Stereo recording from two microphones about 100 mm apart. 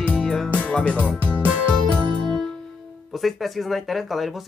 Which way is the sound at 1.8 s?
55° right (ahead or behind).